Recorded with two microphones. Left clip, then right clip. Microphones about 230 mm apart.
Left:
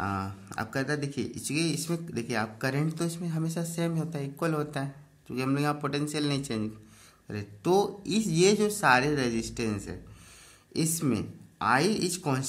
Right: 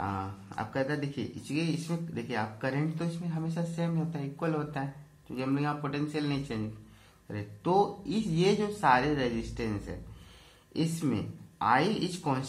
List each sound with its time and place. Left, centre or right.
0.0 s speech: left